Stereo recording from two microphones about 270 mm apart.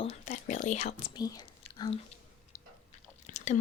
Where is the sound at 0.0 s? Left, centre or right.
Left.